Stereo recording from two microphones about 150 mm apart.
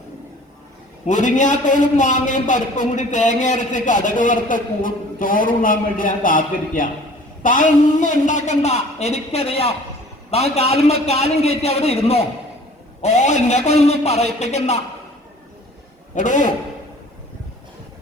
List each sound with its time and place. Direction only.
1.0 s a man's voice: 55° left (ahead or behind)
16.1 s a man's voice: 55° left (ahead or behind)